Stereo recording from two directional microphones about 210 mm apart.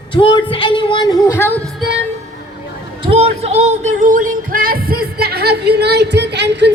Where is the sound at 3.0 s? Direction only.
25° right (ahead or behind); by 5.0 s 45° right (ahead or behind).